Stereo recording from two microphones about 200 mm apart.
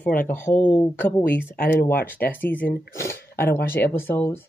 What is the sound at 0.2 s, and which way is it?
Speech, 10° left (ahead or behind).